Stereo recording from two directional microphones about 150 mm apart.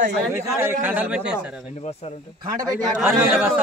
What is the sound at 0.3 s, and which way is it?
Speech, 15° right (ahead or behind).